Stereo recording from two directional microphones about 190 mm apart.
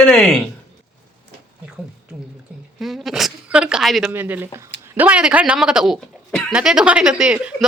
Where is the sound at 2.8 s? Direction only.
Centre (ahead or behind).